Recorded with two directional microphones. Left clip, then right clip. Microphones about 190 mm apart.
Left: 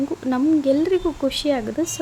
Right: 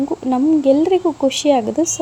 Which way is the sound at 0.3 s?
10° right (ahead or behind).